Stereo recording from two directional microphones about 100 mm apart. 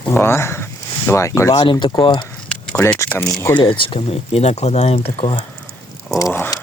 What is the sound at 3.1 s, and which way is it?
Speech, 15° left (ahead or behind).